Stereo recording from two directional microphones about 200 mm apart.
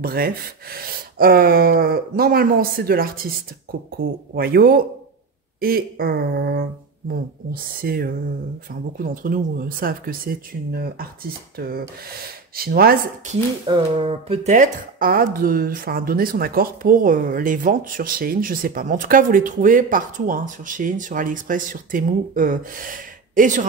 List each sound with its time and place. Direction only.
0.0 s speech: 50° right (ahead or behind)
13.7 s speech: 25° right (ahead or behind); by 23.7 s 40° right (ahead or behind)